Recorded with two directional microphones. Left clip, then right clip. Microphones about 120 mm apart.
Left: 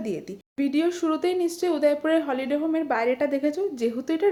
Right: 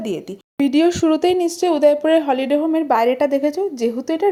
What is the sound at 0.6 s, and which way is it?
A woman's voice, 65° right (ahead or behind).